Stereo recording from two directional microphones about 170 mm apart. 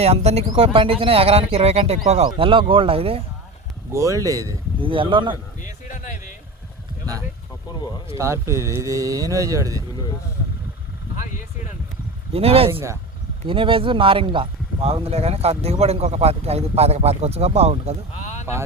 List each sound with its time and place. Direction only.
0.0 s speech: 35° right (ahead or behind)
3.9 s speech: 20° right (ahead or behind)
4.8 s speech: 30° right (ahead or behind)
5.6 s speech: 50° left (ahead or behind)
8.2 s speech: 15° right (ahead or behind)
12.3 s speech: 35° right (ahead or behind)
18.2 s a sound: 45° left (ahead or behind)